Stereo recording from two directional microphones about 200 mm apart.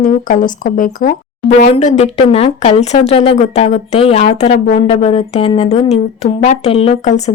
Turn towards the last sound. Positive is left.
turn(degrees=35)  # may be behind; listen again after turning